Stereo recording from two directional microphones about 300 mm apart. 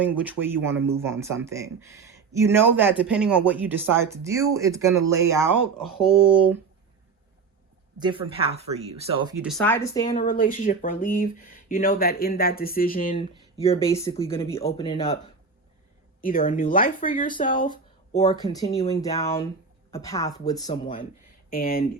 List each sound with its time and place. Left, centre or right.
0.0 s speech: centre
7.9 s speech: centre
10.2 s speech: left
13.6 s speech: centre
16.2 s speech: left
21.5 s speech: left